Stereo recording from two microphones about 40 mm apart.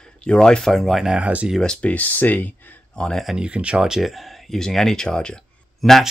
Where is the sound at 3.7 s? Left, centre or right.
Centre.